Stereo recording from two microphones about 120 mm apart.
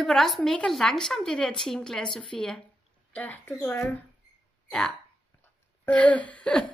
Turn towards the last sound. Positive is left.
turn(degrees=10)  # may be behind; listen again after turning